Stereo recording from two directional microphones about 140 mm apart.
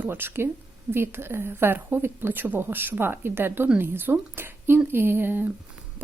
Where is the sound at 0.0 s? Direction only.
15° right (ahead or behind).